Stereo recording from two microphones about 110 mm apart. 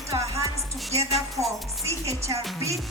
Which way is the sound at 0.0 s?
25° right (ahead or behind).